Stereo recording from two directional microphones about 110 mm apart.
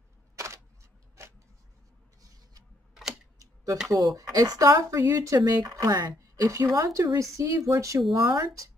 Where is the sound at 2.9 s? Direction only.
5° right (ahead or behind).